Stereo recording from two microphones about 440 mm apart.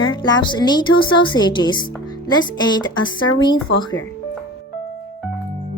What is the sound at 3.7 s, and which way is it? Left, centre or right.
Speech, left.